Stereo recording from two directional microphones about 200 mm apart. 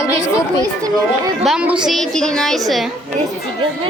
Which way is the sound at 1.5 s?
5° right (ahead or behind).